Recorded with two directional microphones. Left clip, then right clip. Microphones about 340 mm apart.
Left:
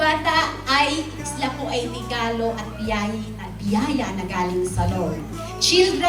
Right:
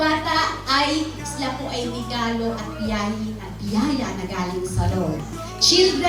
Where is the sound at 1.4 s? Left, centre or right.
Left.